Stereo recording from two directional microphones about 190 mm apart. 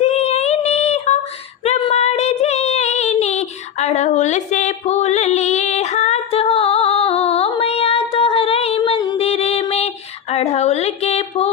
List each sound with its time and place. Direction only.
0.0 s child singing: 35° left (ahead or behind)
1.6 s female singing: 35° left (ahead or behind)